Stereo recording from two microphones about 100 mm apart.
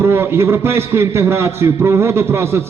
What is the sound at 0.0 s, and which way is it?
A man's voice, 25° right (ahead or behind).